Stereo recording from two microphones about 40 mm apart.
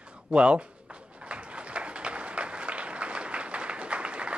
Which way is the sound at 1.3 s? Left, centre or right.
Right.